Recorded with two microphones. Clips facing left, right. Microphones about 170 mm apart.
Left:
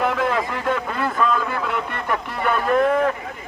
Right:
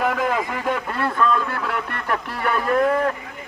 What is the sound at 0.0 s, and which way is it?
Speech, 5° right (ahead or behind).